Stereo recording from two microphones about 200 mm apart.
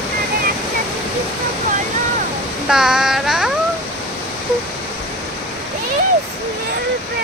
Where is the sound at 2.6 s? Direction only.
5° right (ahead or behind).